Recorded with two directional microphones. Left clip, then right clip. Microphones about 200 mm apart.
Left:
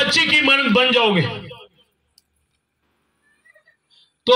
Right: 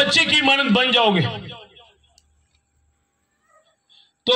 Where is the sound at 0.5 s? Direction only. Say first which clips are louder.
Left 2 dB; 60° right (ahead or behind).